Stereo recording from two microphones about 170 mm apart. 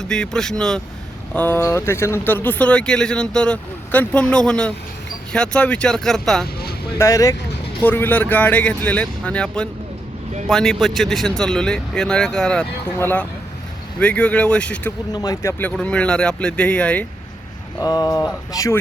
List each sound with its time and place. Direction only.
0.0 s speech: 5° left (ahead or behind)
7.0 s speech: 20° left (ahead or behind)
15.1 s speech: 20° left (ahead or behind)
17.7 s speech: 20° left (ahead or behind)